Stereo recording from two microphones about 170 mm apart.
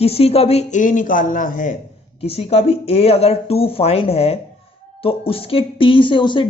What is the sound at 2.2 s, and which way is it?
Speech, 35° left (ahead or behind).